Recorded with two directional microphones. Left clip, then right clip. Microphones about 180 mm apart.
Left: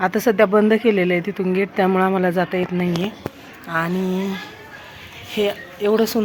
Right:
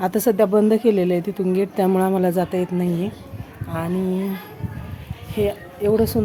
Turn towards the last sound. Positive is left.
turn(degrees=0)  # may be behind; listen again after turning